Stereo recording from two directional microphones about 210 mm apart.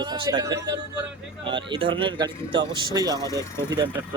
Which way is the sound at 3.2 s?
15° left (ahead or behind).